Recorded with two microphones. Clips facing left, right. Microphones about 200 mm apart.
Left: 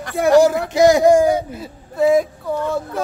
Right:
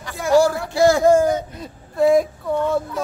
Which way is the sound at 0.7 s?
15° left (ahead or behind).